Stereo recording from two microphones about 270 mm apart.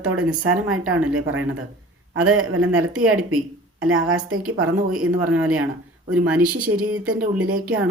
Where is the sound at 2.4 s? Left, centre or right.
Right.